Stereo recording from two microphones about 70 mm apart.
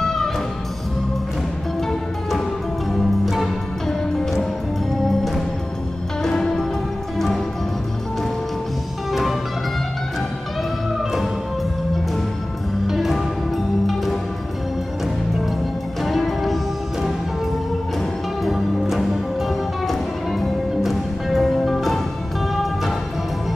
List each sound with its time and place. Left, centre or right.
0.0 s music: centre
2.9 s music: centre
9.1 s music: centre
12.8 s music: centre
16.0 s music: centre
18.4 s music: centre